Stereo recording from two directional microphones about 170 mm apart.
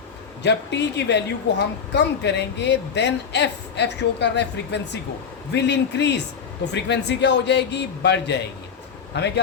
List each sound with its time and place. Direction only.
0.4 s speech: 90° left